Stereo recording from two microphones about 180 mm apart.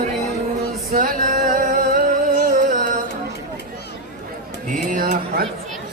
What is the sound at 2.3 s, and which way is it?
Music, 45° right (ahead or behind).